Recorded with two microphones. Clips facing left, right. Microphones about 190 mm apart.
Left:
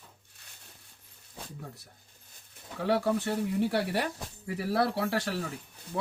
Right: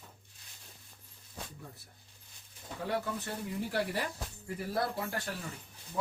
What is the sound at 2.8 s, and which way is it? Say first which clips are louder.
Speech: left 8 dB; 75° left (ahead or behind).